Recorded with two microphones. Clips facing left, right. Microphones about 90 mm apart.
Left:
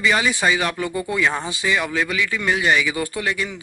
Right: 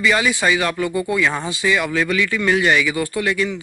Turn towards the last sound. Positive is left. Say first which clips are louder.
# right 4 dB
turn(degrees=20)  # may be behind; listen again after turning